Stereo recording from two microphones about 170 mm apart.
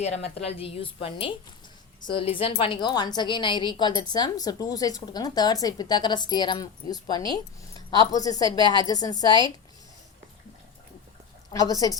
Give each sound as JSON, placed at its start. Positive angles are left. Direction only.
{"t": 0.0, "sound": "a woman's voice", "side_deg": 40}
{"t": 11.5, "sound": "a woman's voice", "side_deg": 20}